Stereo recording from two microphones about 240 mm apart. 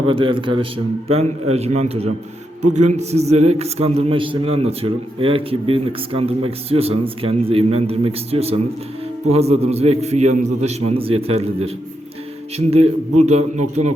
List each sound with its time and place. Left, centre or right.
0.1 s a man's voice: right